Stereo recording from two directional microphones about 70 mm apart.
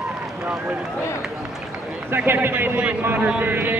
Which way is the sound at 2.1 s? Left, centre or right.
Right.